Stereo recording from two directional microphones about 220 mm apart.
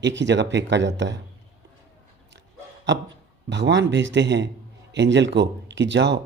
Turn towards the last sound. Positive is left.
turn(degrees=-55)  # may be behind; listen again after turning